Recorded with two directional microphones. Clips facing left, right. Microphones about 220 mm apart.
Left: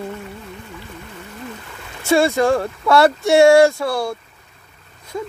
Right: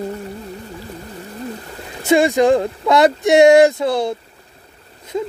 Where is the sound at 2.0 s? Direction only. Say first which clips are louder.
Right 2 dB; 15° right (ahead or behind).